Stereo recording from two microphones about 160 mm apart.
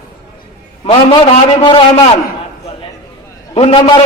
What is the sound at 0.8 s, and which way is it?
A man's voice, 35° left (ahead or behind).